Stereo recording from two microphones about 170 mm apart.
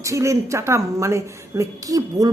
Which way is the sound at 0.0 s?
15° right (ahead or behind).